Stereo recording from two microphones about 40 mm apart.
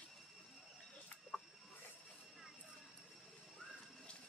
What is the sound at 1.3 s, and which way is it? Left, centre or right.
Cricket, left.